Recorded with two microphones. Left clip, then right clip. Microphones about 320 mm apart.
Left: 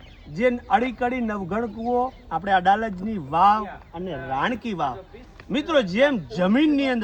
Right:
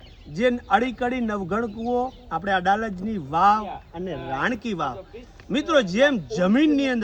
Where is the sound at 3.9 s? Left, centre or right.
Centre.